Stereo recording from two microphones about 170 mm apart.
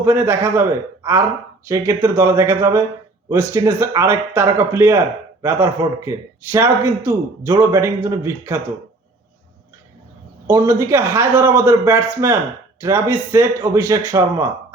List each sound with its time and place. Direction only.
0.0 s a man's voice: 15° right (ahead or behind)
1.6 s a man's voice: 15° right (ahead or behind)
10.4 s a man's voice: 15° right (ahead or behind)